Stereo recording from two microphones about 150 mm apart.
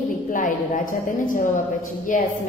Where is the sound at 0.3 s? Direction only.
60° left (ahead or behind).